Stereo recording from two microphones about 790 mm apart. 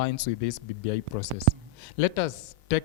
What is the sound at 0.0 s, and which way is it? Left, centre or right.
A man's voice, left.